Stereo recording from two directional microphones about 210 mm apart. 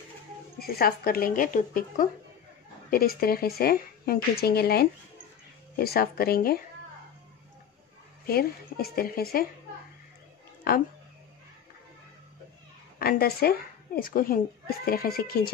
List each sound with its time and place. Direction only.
0.6 s speech: 45° left (ahead or behind)
8.3 s speech: 45° left (ahead or behind)
13.0 s a woman's voice: 45° left (ahead or behind)